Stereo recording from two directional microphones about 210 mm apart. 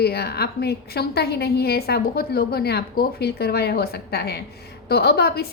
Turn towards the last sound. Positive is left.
turn(degrees=50)  # may be behind; listen again after turning